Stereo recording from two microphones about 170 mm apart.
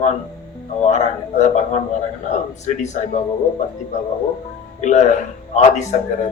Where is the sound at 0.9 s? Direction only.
45° left (ahead or behind).